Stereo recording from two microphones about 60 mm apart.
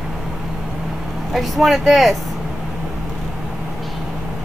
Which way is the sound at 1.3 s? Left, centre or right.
Centre.